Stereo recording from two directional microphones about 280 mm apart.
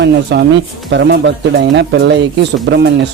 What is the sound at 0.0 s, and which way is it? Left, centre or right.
Speech, right.